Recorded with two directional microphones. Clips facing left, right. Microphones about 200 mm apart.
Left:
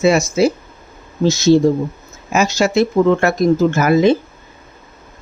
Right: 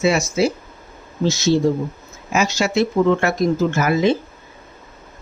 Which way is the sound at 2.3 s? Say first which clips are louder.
Left 4 dB; 45° left (ahead or behind).